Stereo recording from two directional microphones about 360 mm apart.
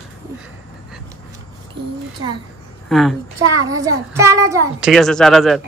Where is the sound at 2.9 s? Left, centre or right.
Centre.